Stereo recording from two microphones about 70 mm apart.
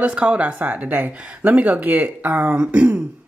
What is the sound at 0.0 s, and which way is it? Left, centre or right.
A woman's voice, centre.